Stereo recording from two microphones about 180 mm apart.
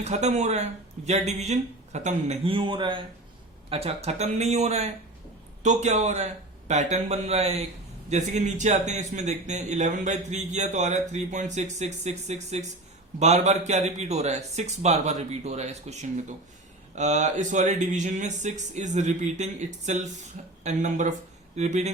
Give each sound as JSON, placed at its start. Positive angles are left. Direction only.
{"t": 0.0, "sound": "speech", "side_deg": -40}